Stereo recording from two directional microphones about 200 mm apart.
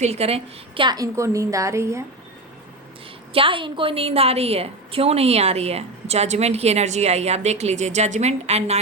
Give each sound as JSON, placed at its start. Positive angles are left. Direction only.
{"t": 0.0, "sound": "a woman's voice", "side_deg": -30}
{"t": 3.3, "sound": "a woman's voice", "side_deg": -25}